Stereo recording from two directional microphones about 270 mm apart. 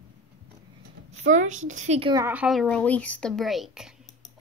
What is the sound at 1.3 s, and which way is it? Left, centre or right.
Speech, right.